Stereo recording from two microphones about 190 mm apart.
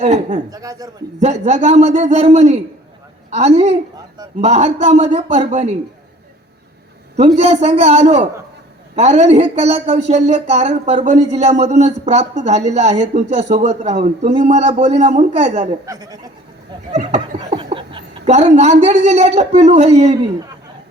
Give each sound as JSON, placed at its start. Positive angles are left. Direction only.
{"t": 0.0, "sound": "speech", "side_deg": -35}
{"t": 0.5, "sound": "speech", "side_deg": -20}
{"t": 1.2, "sound": "speech", "side_deg": -35}
{"t": 7.2, "sound": "speech", "side_deg": -35}
{"t": 15.9, "sound": "speech", "side_deg": -20}
{"t": 16.9, "sound": "a woman's voice", "side_deg": -35}